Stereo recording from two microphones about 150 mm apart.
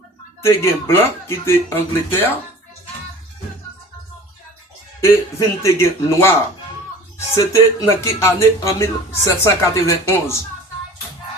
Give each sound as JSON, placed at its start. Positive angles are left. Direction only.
{"t": 0.4, "sound": "speech", "side_deg": 15}
{"t": 4.9, "sound": "speech", "side_deg": 15}
{"t": 7.3, "sound": "speech", "side_deg": 20}